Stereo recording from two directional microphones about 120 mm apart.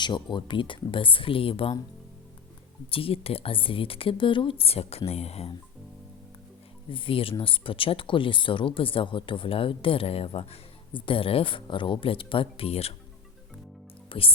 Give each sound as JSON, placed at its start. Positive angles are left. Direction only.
{"t": 0.0, "sound": "speech", "side_deg": 40}
{"t": 2.9, "sound": "speech", "side_deg": 50}
{"t": 6.9, "sound": "speech", "side_deg": 45}
{"t": 14.1, "sound": "speech", "side_deg": 50}